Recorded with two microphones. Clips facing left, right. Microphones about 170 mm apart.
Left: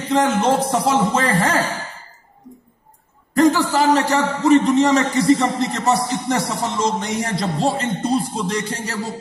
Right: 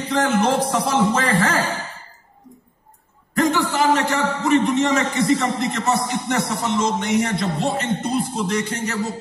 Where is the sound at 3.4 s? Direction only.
40° left (ahead or behind).